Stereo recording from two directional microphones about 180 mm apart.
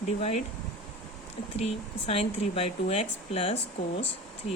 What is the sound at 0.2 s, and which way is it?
Speech, 35° left (ahead or behind).